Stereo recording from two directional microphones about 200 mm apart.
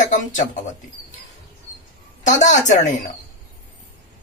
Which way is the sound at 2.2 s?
35° left (ahead or behind).